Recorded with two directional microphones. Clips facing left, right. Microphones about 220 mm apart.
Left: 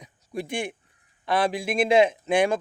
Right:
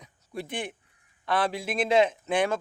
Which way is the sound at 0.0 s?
15° left (ahead or behind).